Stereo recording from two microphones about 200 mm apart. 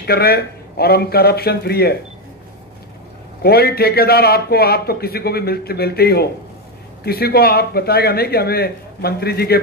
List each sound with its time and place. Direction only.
0.0 s a man's voice: 50° left (ahead or behind)
3.4 s a man's voice: 50° left (ahead or behind)